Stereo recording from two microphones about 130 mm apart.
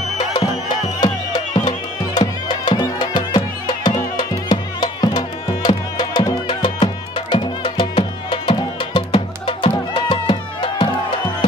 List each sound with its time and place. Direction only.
1.0 s music: 35° left (ahead or behind)